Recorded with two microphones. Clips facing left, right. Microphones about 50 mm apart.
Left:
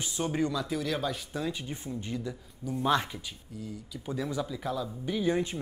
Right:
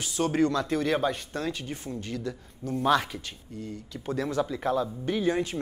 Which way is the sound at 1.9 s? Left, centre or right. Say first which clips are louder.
Right 1 dB; centre.